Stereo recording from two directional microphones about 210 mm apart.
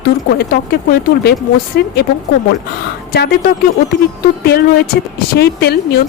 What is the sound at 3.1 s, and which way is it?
A woman's voice, 45° left (ahead or behind).